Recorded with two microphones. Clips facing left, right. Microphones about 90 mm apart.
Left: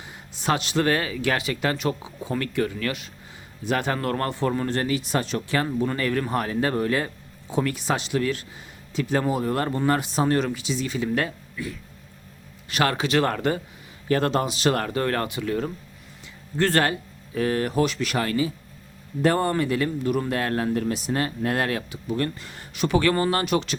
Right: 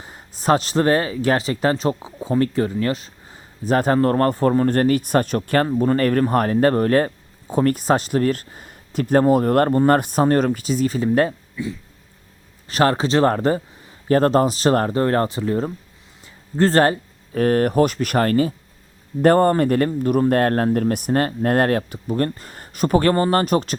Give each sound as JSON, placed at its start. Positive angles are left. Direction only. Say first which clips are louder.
{"t": 0.0, "sound": "speech", "louder": "right 5 dB", "side_deg": -40}
{"t": 11.5, "sound": "speech", "louder": "right 5 dB", "side_deg": -25}